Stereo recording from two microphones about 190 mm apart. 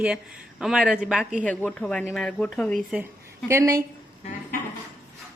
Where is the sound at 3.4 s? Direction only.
15° right (ahead or behind).